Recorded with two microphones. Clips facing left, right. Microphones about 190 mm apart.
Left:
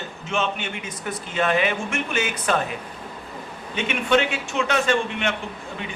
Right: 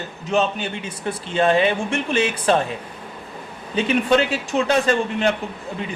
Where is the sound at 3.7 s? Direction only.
35° right (ahead or behind).